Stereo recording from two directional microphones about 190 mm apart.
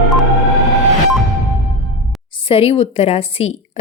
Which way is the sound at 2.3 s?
30° left (ahead or behind).